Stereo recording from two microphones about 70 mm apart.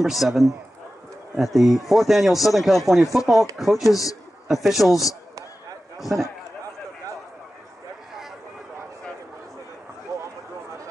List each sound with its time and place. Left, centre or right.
0.0 s speech: centre
3.9 s a man's voice: left
4.5 s speech: centre
5.9 s a man's voice: centre
10.1 s a sound: right